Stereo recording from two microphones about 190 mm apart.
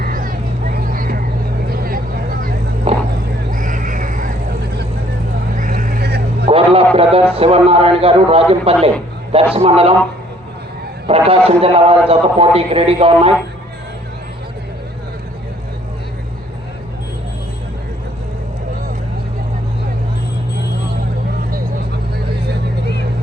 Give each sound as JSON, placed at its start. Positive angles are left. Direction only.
{"t": 0.0, "sound": "vehicle", "side_deg": -45}
{"t": 2.9, "sound": "vehicle", "side_deg": -30}
{"t": 3.5, "sound": "a sound", "side_deg": -45}
{"t": 5.5, "sound": "vehicle", "side_deg": -40}
{"t": 6.5, "sound": "a sound", "side_deg": -30}
{"t": 9.3, "sound": "a man's voice", "side_deg": -30}
{"t": 11.0, "sound": "a man's voice", "side_deg": -30}